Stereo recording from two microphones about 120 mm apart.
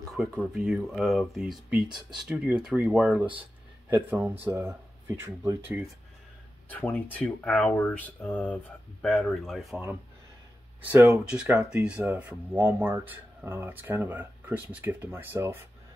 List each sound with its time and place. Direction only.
0.2 s speech: 5° right (ahead or behind)
6.7 s speech: 10° left (ahead or behind)
9.3 s speech: centre (ahead or behind)
10.9 s speech: 15° right (ahead or behind)